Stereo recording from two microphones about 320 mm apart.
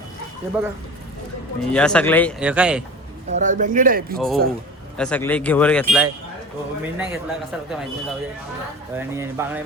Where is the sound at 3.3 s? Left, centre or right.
Right.